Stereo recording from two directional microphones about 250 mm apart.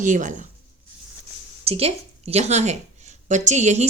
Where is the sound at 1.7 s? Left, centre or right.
Right.